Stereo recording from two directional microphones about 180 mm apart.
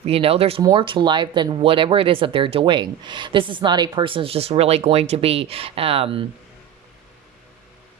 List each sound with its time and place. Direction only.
0.0 s speech: 35° right (ahead or behind)